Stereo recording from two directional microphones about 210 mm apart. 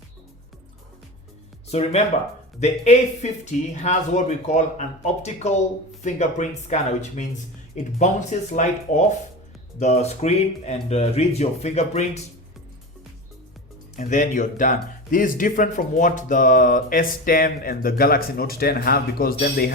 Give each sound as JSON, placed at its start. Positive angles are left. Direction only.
{"t": 1.7, "sound": "speech", "side_deg": 30}
{"t": 13.9, "sound": "speech", "side_deg": 35}